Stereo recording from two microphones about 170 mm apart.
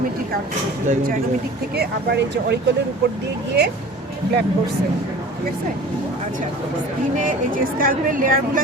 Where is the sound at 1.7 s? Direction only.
80° right.